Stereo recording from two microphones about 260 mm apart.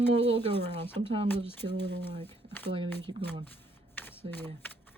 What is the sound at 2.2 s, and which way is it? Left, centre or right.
Speech, centre.